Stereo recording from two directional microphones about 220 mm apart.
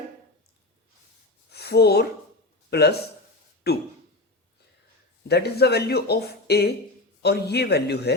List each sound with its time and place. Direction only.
1.5 s a sound: 50° left (ahead or behind)
2.6 s a man's voice: 45° left (ahead or behind)
5.3 s speech: 45° left (ahead or behind)